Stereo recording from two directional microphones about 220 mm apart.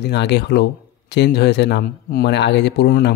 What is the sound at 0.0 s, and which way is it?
Speech, 50° left (ahead or behind).